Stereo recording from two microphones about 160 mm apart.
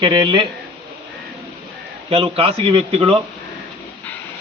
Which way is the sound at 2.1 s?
35° right (ahead or behind).